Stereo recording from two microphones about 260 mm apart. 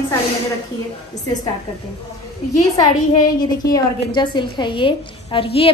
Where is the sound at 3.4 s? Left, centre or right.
Centre.